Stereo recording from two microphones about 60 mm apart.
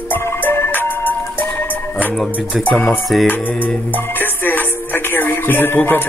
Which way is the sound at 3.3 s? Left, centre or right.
Left.